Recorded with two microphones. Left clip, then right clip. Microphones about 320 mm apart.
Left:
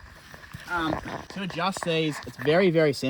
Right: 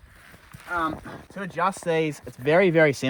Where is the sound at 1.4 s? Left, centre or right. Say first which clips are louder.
Right 4 dB; right.